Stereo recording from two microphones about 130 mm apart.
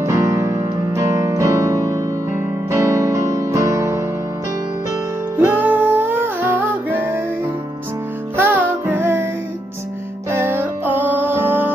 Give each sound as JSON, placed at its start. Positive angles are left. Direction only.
{"t": 0.0, "sound": "music", "side_deg": -25}
{"t": 5.4, "sound": "music", "side_deg": -15}
{"t": 8.4, "sound": "music", "side_deg": -15}
{"t": 10.3, "sound": "music", "side_deg": -15}